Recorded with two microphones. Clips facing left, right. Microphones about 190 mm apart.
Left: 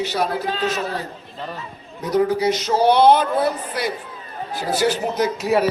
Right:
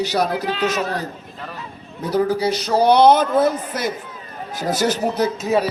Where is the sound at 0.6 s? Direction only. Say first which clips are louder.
Right 2 dB; 40° right (ahead or behind).